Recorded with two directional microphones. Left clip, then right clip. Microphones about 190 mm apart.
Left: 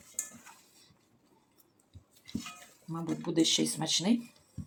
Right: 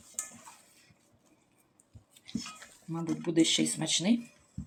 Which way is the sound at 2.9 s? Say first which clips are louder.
Right 2 dB; 10° left (ahead or behind).